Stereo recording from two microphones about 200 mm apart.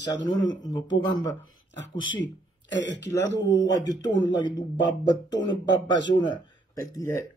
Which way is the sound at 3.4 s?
20° left (ahead or behind).